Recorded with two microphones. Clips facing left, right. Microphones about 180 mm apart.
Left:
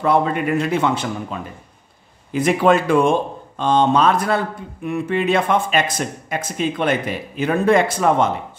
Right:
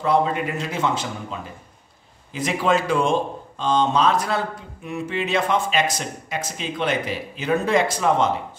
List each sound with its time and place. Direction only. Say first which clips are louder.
0.0 s speech: left 3 dB; 60° left (ahead or behind)